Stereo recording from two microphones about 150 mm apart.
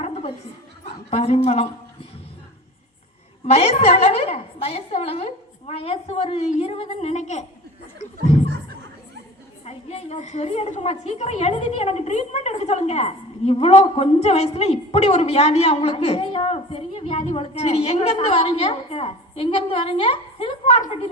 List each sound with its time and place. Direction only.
0.0 s a sound: 40° left (ahead or behind)
1.1 s a woman's voice: 45° left (ahead or behind)
3.4 s a woman's voice: 45° left (ahead or behind)
9.6 s a woman's voice: 45° left (ahead or behind)